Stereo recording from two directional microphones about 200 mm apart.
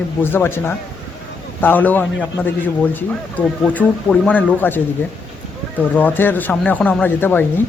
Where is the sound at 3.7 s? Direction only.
5° left (ahead or behind).